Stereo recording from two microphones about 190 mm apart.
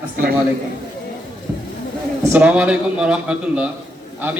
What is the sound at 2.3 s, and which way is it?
Speech, 5° right (ahead or behind).